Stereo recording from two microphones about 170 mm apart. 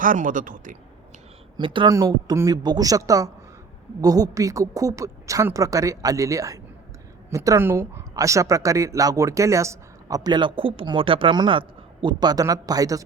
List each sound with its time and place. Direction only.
0.0 s speech: 50° right (ahead or behind)
1.5 s a woman's voice: 30° right (ahead or behind)